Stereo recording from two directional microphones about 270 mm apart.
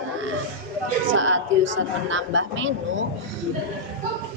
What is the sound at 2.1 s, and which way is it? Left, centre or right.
Speech, right.